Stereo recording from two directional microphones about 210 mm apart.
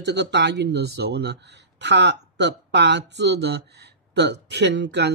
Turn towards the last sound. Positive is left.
turn(degrees=-55)  # may be behind; listen again after turning